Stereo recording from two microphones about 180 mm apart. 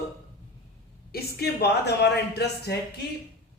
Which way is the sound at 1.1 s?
65° left (ahead or behind).